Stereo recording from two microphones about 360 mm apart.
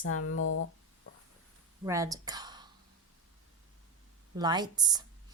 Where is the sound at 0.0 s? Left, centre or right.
Left.